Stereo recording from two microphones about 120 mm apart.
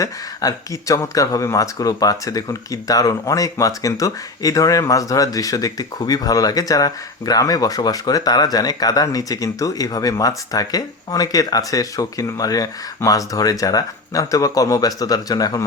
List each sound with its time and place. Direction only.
0.0 s speech: 30° left (ahead or behind)